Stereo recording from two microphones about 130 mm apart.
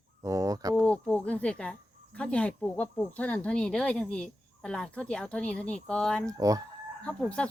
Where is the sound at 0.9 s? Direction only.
10° left (ahead or behind).